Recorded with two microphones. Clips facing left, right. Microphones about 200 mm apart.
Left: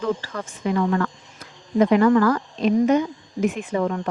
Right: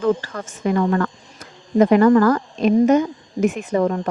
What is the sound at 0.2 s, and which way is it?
Speech, 50° right (ahead or behind).